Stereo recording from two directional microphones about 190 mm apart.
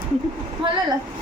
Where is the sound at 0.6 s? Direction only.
25° right (ahead or behind).